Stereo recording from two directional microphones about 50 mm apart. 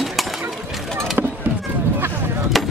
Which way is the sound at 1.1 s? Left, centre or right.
Right.